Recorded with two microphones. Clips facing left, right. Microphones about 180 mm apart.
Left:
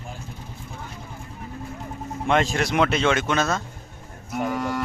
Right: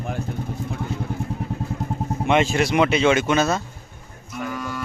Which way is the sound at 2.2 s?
5° right (ahead or behind).